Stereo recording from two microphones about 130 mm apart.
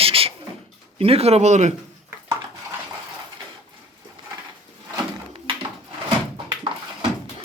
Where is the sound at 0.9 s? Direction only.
50° right (ahead or behind).